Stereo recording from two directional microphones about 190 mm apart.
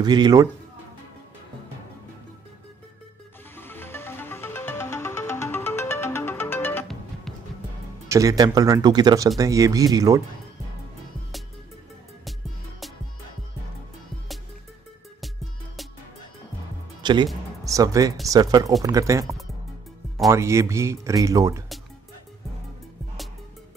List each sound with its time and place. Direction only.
0.0 s speech: 20° right (ahead or behind)
3.5 s music: 10° left (ahead or behind)
8.1 s speech: 15° right (ahead or behind)
15.1 s music: centre (ahead or behind)
17.0 s speech: 25° right (ahead or behind)